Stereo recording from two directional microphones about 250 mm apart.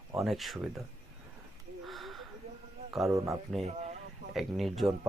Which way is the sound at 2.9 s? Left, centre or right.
Centre.